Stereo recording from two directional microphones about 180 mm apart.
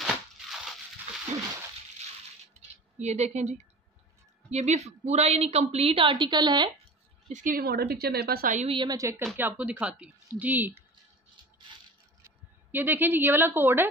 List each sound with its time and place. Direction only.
3.0 s a woman's voice: 40° right (ahead or behind); by 6.9 s 25° right (ahead or behind)
7.2 s a woman's voice: 45° right (ahead or behind)
8.6 s a woman's voice: 25° right (ahead or behind)
12.7 s a woman's voice: 10° right (ahead or behind)